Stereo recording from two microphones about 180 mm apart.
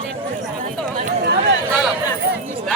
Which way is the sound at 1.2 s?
70° right (ahead or behind).